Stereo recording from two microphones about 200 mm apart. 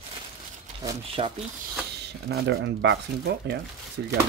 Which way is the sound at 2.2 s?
60° right (ahead or behind).